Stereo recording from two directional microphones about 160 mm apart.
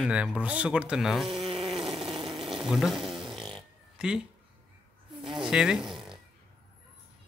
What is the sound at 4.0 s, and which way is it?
Speech, 5° right (ahead or behind).